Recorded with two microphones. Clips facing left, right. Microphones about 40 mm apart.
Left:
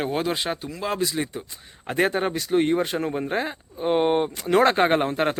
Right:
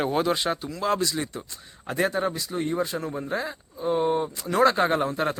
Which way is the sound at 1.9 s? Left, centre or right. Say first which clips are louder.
Left 2 dB; left.